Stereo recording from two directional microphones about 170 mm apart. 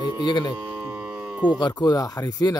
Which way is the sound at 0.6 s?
15° right (ahead or behind).